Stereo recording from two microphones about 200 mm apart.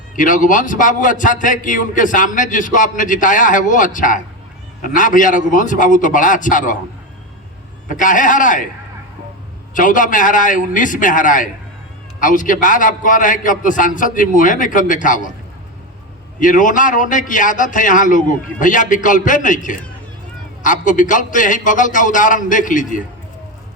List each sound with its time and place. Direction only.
0.2 s a man's voice: 40° left (ahead or behind)
7.9 s a man's voice: 40° left (ahead or behind)
9.7 s a man's voice: 40° left (ahead or behind)
16.4 s a man's voice: 40° left (ahead or behind)